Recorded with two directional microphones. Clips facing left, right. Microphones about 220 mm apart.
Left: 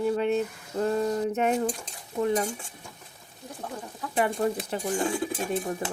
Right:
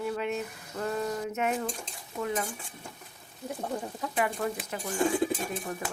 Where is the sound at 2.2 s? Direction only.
30° left (ahead or behind).